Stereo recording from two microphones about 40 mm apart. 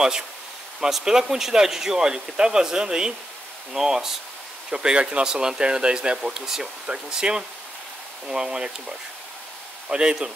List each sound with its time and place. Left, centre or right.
0.7 s speech: centre